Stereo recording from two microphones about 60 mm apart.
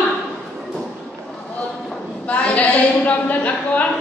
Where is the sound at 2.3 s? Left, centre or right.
Left.